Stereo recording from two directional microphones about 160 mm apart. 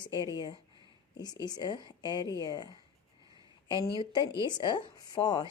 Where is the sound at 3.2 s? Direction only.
25° right (ahead or behind).